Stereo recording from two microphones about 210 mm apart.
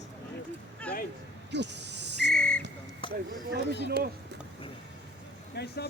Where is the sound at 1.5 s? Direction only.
55° right (ahead or behind).